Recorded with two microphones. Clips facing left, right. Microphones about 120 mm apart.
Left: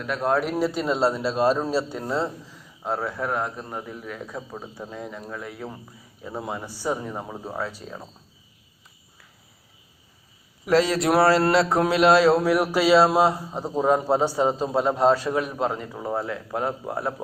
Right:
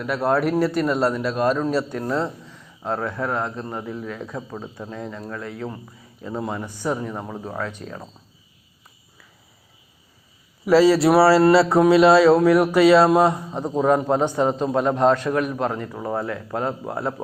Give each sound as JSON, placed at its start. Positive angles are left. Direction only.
{"t": 0.0, "sound": "speech", "side_deg": -5}
{"t": 0.9, "sound": "a man's voice", "side_deg": 25}
{"t": 1.9, "sound": "speech", "side_deg": 10}
{"t": 10.7, "sound": "speech", "side_deg": 0}